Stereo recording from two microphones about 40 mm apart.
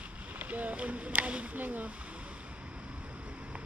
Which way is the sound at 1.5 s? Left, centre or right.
Right.